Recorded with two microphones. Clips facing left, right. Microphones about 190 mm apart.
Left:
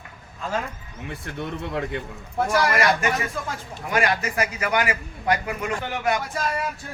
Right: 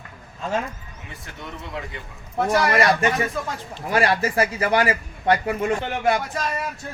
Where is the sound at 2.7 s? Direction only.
30° right (ahead or behind).